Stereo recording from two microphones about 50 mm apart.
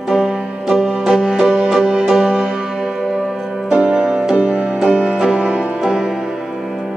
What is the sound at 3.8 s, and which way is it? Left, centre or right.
Music, centre.